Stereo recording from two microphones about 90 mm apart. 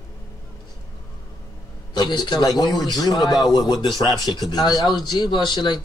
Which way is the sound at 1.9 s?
55° left (ahead or behind).